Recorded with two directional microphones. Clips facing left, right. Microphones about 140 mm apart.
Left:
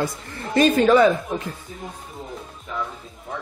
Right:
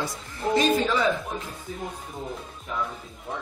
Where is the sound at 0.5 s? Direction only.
55° left (ahead or behind).